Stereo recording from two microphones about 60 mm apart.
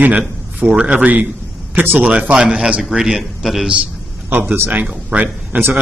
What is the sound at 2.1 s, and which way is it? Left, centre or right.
Speech, centre.